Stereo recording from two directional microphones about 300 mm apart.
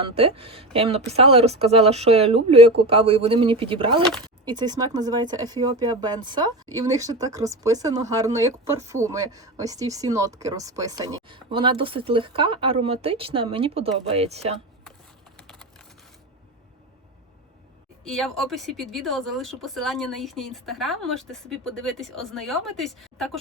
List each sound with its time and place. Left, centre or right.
0.0 s speech: centre
15.4 s typing: centre
18.0 s speech: centre